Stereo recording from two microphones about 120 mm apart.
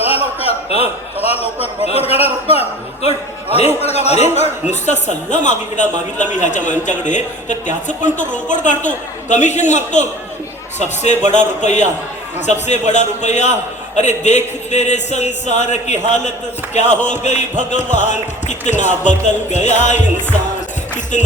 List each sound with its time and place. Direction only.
0.3 s a man's voice: 55° left (ahead or behind); by 20.0 s 80° left